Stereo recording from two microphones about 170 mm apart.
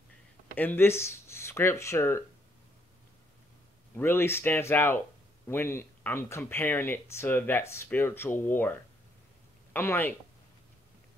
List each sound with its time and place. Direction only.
0.6 s speech: 10° left (ahead or behind)
3.9 s speech: 15° left (ahead or behind)